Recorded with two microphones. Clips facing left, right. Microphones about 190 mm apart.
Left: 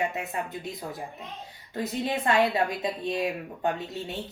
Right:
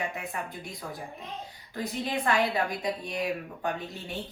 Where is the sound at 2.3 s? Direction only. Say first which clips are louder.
Left 3 dB; 25° left (ahead or behind).